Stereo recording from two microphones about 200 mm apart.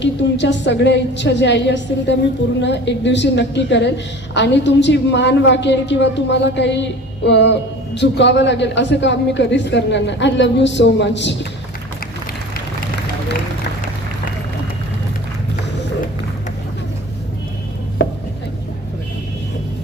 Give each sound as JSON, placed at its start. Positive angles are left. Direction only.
{"t": 0.0, "sound": "a woman's voice", "side_deg": 60}